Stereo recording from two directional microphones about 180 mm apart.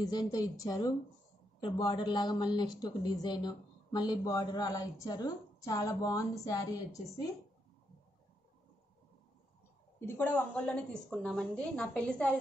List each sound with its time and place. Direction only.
0.0 s a woman's voice: 20° left (ahead or behind)
9.9 s a woman's voice: 10° left (ahead or behind)